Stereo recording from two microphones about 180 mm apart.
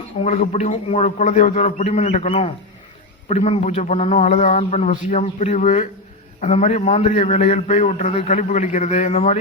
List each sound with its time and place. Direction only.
0.1 s a man's voice: 40° left (ahead or behind)